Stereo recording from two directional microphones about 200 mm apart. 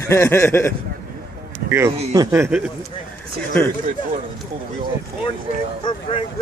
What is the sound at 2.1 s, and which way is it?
Speech, 15° right (ahead or behind).